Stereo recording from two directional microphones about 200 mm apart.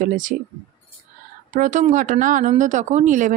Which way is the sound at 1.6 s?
40° right (ahead or behind).